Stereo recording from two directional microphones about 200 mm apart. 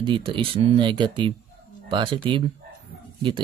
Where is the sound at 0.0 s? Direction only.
25° right (ahead or behind).